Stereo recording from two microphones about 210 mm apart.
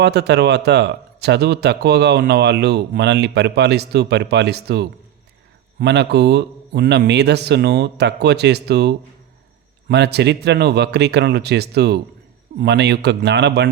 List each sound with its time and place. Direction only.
0.0 s a man's voice: 55° right (ahead or behind)